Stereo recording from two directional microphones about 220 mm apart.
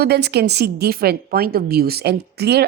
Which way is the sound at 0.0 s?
50° right (ahead or behind).